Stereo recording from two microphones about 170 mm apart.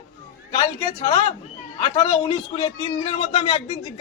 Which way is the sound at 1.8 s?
30° left (ahead or behind).